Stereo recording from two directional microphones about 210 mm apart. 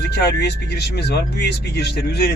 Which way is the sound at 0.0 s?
50° left (ahead or behind).